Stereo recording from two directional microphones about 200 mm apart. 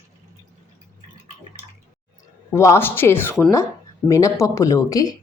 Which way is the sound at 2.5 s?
15° left (ahead or behind).